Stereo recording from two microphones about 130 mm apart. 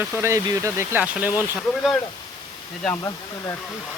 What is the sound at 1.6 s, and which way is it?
Speech, centre (ahead or behind).